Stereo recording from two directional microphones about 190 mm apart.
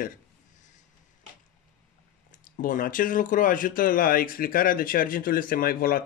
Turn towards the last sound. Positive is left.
turn(degrees=50)  # may be behind; listen again after turning